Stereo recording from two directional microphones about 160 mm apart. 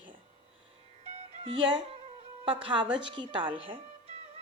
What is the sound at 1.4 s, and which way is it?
A woman's voice, 30° right (ahead or behind).